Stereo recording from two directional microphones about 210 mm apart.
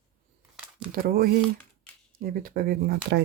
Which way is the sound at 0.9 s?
45° right (ahead or behind).